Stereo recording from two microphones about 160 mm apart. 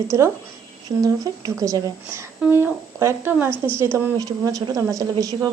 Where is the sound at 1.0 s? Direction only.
20° right (ahead or behind).